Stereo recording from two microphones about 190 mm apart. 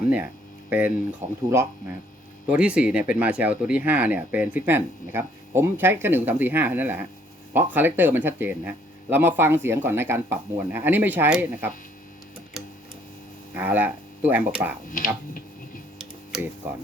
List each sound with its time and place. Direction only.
0.7 s speech: 10° right (ahead or behind)
1.2 s speech: 40° right (ahead or behind)
2.5 s speech: 5° right (ahead or behind)
13.6 s speech: 10° right (ahead or behind)
15.0 s a sound: 45° left (ahead or behind)
16.0 s tick-tock: centre (ahead or behind)